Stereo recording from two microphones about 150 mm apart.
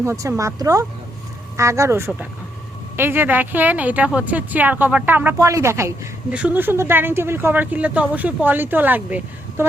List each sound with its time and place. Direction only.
0.0 s a woman's voice: 20° right (ahead or behind)